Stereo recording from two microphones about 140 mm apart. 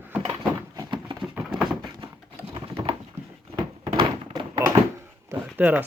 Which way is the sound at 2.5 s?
35° right (ahead or behind).